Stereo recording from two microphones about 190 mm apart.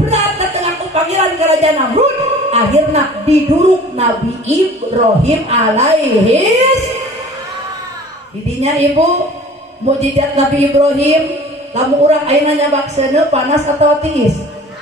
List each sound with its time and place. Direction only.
0.1 s a woman's voice: 35° right (ahead or behind)
8.5 s a woman's voice: 35° right (ahead or behind)